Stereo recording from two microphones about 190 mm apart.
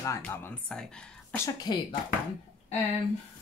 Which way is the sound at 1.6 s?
25° left (ahead or behind).